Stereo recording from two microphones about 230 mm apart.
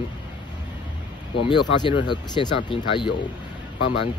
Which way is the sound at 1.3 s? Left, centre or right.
Left.